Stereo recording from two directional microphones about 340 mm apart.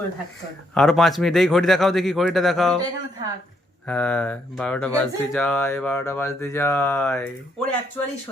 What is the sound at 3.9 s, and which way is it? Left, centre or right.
A child's voice, centre.